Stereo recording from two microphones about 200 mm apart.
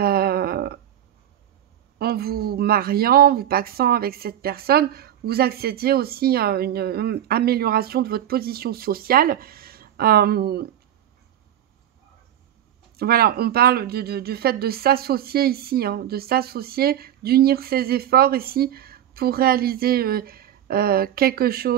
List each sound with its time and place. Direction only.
0.0 s a sound: 50° right (ahead or behind)
2.0 s speech: 50° right (ahead or behind)
12.9 s speech: 50° right (ahead or behind)